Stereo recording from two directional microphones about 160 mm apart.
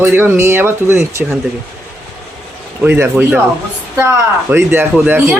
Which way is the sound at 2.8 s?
10° right (ahead or behind).